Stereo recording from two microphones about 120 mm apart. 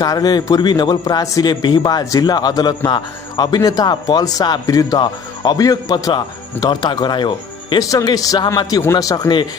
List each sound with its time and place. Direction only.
0.0 s a man's voice: 30° left (ahead or behind)